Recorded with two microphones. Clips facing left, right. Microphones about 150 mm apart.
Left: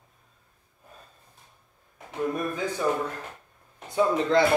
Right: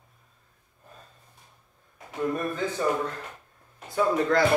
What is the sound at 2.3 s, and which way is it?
Speech, 10° left (ahead or behind).